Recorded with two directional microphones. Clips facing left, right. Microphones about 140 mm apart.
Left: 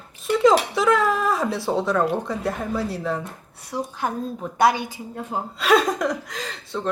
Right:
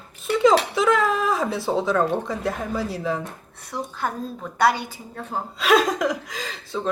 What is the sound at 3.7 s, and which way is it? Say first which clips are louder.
A woman's voice: left 2 dB; 15° left (ahead or behind).